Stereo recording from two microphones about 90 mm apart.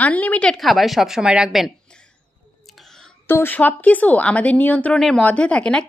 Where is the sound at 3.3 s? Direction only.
25° left (ahead or behind).